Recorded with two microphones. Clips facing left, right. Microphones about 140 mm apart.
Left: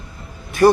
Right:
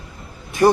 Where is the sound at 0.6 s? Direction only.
15° right (ahead or behind).